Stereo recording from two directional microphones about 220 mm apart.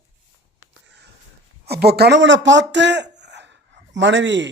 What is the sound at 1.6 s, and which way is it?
Speech, 45° right (ahead or behind).